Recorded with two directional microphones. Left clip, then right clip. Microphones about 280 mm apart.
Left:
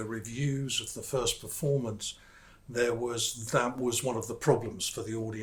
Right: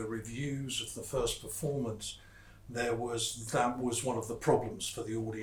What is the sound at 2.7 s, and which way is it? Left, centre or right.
Speech, left.